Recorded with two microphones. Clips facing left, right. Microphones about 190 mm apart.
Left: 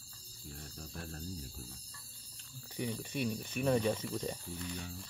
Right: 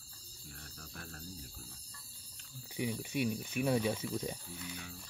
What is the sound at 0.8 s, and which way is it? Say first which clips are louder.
Cricket: left 4 dB; 30° left (ahead or behind).